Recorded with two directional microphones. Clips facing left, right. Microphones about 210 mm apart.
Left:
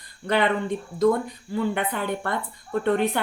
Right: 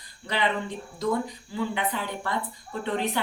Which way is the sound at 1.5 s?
55° left (ahead or behind).